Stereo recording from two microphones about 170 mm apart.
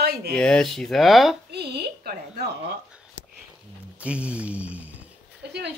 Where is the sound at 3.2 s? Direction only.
90° left.